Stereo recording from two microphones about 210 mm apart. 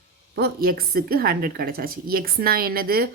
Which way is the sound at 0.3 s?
45° right (ahead or behind).